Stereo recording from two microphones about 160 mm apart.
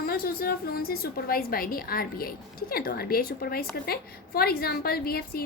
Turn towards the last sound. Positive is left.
turn(degrees=70)  # may be behind; listen again after turning